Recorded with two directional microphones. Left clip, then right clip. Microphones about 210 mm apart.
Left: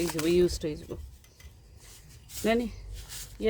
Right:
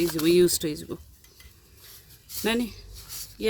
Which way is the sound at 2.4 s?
50° right (ahead or behind).